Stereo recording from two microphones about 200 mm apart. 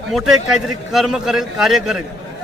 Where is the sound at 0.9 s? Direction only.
Centre (ahead or behind).